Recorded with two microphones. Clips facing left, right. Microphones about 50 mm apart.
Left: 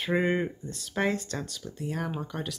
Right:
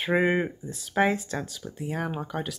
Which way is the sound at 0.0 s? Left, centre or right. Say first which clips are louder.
Right 3 dB; centre.